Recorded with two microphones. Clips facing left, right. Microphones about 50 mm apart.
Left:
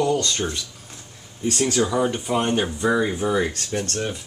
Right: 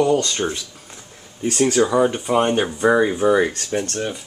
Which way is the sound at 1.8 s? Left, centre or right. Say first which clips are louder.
Right 5 dB; right.